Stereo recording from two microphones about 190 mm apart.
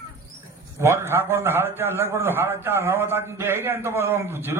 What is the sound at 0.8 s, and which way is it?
A man's voice, 15° right (ahead or behind).